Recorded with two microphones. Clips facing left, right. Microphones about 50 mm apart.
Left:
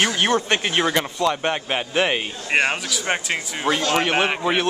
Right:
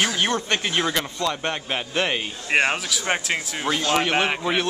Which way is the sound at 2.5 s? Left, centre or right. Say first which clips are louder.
Even; centre.